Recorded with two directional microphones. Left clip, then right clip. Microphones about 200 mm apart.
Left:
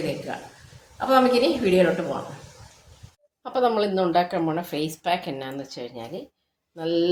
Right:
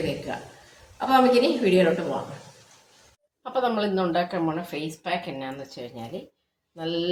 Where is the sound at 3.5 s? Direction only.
30° left (ahead or behind).